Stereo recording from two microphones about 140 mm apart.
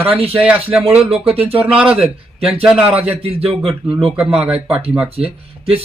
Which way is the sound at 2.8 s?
45° right (ahead or behind).